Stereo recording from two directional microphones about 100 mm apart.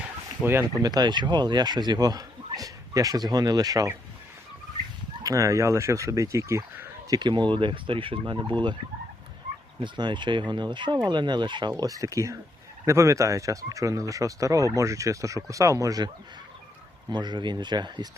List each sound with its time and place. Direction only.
0.8 s speech: 40° right (ahead or behind)
5.2 s speech: 30° right (ahead or behind)
7.1 s speech: 50° right (ahead or behind)
8.2 s speech: 45° right (ahead or behind)
9.8 s speech: 50° right (ahead or behind)
11.8 s speech: 35° right (ahead or behind)
17.1 s speech: 50° right (ahead or behind)